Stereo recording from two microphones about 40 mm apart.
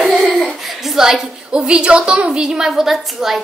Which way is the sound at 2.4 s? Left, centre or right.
Centre.